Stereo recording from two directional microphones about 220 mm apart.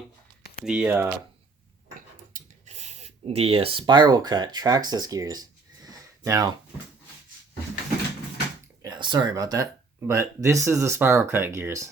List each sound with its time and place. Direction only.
0.6 s speech: 5° right (ahead or behind)
2.3 s a sound: 30° right (ahead or behind)
8.8 s speech: 20° right (ahead or behind)